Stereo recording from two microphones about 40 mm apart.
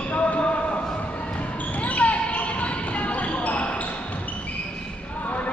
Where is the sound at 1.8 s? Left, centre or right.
Left.